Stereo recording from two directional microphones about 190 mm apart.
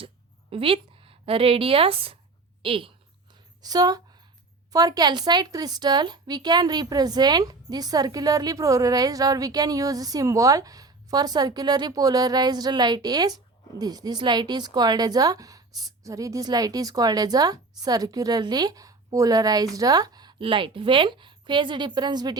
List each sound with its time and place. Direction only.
0.5 s a woman's voice: 30° right (ahead or behind)